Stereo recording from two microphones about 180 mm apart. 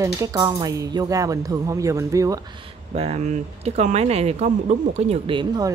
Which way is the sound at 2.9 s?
35° right (ahead or behind).